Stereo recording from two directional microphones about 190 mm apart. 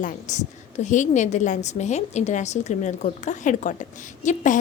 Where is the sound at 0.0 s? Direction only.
40° left (ahead or behind).